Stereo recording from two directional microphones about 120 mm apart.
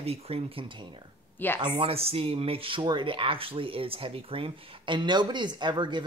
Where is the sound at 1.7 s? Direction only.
55° right (ahead or behind).